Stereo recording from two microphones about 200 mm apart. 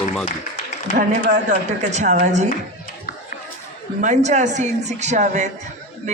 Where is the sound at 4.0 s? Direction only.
35° right (ahead or behind).